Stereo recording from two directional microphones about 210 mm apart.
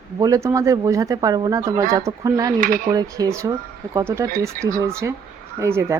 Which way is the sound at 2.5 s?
40° right (ahead or behind).